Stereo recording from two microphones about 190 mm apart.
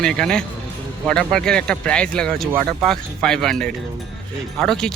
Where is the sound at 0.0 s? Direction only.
5° left (ahead or behind).